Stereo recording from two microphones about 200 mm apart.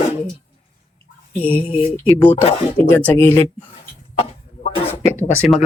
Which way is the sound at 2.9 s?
10° left (ahead or behind).